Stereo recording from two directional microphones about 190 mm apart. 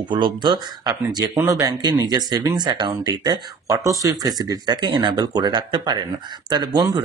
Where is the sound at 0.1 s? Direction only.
25° right (ahead or behind).